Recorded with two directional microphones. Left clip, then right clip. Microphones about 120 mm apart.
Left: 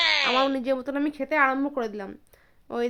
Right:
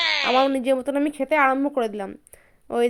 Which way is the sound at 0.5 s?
30° right (ahead or behind).